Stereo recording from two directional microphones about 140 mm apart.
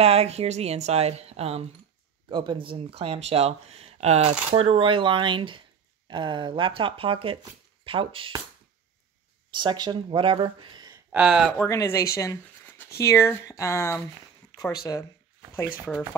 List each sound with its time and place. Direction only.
0.0 s speech: 45° right (ahead or behind)
2.2 s speech: 35° right (ahead or behind)
9.5 s speech: 35° right (ahead or behind)
11.1 s speech: 5° right (ahead or behind)
11.5 s speech: 20° left (ahead or behind)